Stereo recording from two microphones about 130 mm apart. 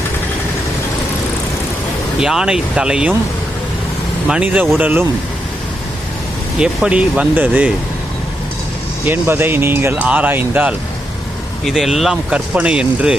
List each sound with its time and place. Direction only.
2.2 s speech: 5° right (ahead or behind)
4.3 s speech: 10° right (ahead or behind)
6.6 s speech: 10° right (ahead or behind)
9.0 s speech: 15° right (ahead or behind)